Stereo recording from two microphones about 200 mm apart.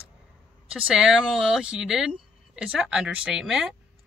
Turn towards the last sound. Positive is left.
turn(degrees=-5)  # may be behind; listen again after turning